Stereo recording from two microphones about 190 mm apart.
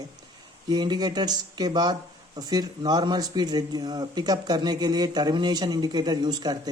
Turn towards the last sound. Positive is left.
turn(degrees=-20)  # may be behind; listen again after turning